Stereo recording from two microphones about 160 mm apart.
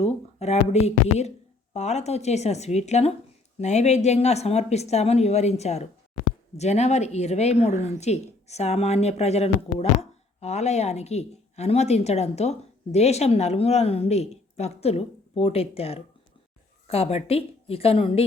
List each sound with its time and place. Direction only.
0.0 s a woman's voice: 45° left (ahead or behind)